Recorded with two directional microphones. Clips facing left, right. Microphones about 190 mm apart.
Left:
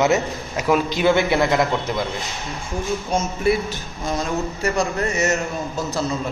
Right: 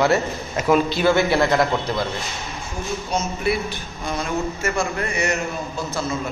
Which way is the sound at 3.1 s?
50° left (ahead or behind).